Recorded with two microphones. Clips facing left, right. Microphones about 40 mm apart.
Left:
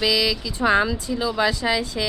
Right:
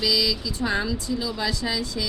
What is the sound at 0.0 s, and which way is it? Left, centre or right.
Speech, left.